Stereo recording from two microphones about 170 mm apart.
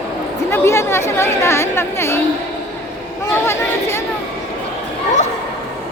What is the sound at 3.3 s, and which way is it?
Speech, 15° left (ahead or behind).